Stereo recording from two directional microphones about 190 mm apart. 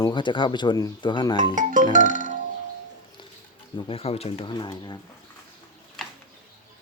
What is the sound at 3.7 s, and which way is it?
Speech, 25° left (ahead or behind).